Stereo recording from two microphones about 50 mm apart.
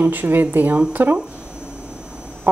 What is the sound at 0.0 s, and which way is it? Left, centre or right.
A woman's voice, right.